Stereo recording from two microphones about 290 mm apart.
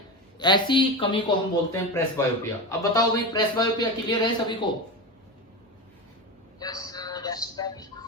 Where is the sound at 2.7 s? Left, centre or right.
Centre.